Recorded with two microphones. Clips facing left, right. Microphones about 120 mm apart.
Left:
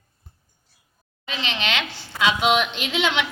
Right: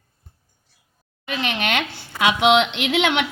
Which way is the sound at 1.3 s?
55° right (ahead or behind).